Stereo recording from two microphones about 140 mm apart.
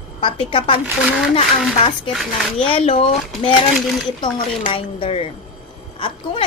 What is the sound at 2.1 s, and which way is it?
Speech, centre (ahead or behind).